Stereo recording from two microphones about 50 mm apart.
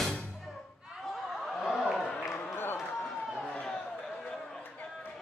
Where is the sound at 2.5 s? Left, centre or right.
Left.